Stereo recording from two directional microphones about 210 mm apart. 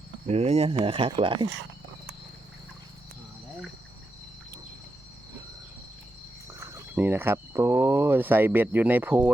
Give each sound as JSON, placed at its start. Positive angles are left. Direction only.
{"t": 0.3, "sound": "speech", "side_deg": -30}
{"t": 6.9, "sound": "speech", "side_deg": -10}